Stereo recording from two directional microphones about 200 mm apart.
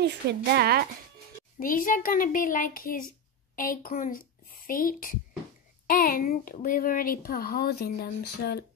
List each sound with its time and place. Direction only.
0.0 s a woman's voice: 55° right (ahead or behind)
1.6 s a child's voice: 45° left (ahead or behind)